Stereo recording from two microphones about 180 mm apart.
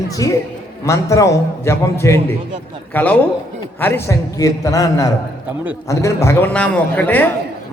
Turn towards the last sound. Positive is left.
turn(degrees=10)  # may be behind; listen again after turning